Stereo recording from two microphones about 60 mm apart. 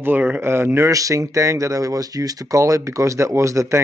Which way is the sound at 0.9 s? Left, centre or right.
Right.